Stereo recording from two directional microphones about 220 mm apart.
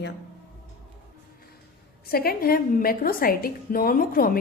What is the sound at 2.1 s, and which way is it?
A woman's voice, 45° left (ahead or behind).